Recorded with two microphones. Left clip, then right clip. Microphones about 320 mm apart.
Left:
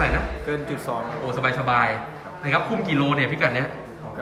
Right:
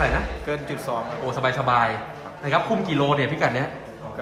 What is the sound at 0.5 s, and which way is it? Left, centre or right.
A man's voice, centre.